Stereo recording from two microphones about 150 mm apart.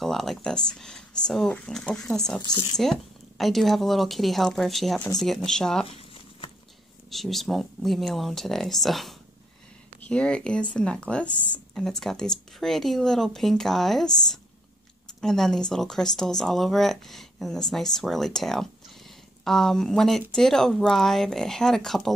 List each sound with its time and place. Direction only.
0.0 s speech: centre (ahead or behind)
2.4 s speech: 25° left (ahead or behind)
2.8 s speech: centre (ahead or behind)
5.9 s a sound: 40° left (ahead or behind)
7.1 s speech: centre (ahead or behind)